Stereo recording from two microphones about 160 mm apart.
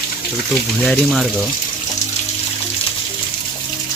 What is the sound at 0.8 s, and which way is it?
Speech, centre (ahead or behind).